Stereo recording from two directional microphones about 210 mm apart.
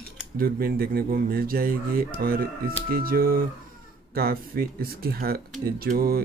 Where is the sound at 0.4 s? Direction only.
45° right (ahead or behind).